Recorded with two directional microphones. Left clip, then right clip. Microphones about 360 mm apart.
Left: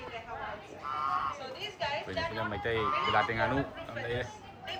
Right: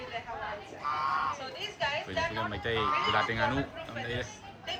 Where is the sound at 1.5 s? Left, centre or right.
Centre.